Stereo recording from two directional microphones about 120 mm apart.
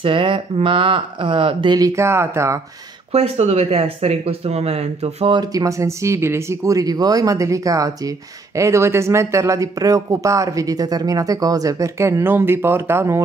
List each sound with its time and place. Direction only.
0.0 s speech: 45° right (ahead or behind)
1.9 s speech: 20° right (ahead or behind)
3.1 s speech: 60° right (ahead or behind)
5.3 s speech: 35° right (ahead or behind)